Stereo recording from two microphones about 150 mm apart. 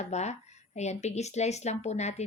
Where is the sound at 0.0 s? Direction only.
50° left (ahead or behind).